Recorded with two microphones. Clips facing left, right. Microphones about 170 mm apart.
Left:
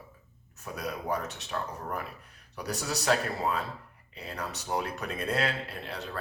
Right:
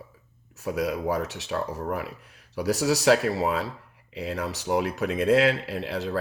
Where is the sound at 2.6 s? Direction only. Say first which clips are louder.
Right 10 dB; 90° right.